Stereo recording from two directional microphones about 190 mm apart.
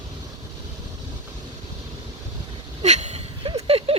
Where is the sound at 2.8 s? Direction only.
35° right (ahead or behind).